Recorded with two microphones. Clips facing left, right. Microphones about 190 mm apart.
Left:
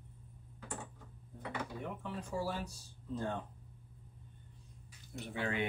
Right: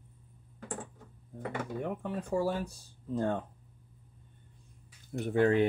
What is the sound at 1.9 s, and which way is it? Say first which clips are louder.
Speech: right 8 dB; 55° right (ahead or behind).